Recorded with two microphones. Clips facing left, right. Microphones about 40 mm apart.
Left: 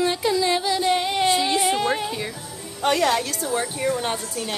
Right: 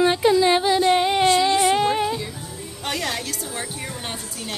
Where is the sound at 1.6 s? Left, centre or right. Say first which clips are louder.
Right 3 dB; centre.